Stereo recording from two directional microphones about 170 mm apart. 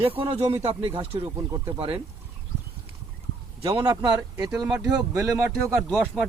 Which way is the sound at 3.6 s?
30° right (ahead or behind).